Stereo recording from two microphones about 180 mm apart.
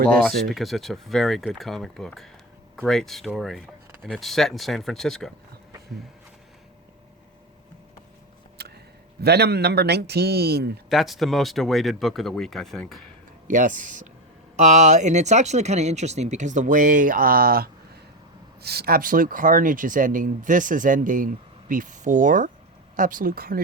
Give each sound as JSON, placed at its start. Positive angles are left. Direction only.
{"t": 0.1, "sound": "speech", "side_deg": 0}
{"t": 8.5, "sound": "a sound", "side_deg": -65}
{"t": 9.2, "sound": "a man's voice", "side_deg": -65}
{"t": 10.8, "sound": "speech", "side_deg": 0}
{"t": 13.5, "sound": "speech", "side_deg": -45}